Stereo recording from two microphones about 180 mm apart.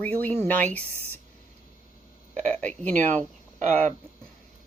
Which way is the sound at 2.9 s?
40° right (ahead or behind).